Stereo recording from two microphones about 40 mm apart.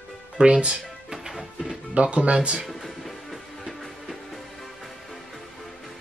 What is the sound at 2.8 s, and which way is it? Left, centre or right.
Music, centre.